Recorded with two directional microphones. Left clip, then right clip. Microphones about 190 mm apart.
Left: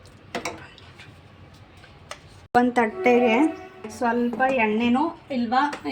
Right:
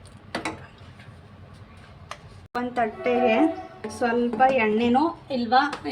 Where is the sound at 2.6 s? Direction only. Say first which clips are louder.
Left 5 dB; 55° left (ahead or behind).